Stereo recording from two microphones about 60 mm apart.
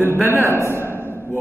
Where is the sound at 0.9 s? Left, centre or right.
Left.